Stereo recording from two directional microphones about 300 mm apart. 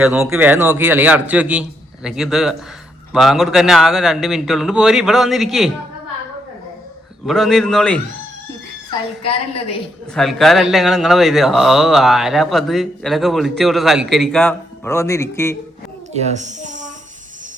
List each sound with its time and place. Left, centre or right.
0.0 s speech: centre
7.3 s speech: centre
10.2 s speech: centre
16.1 s a child's voice: right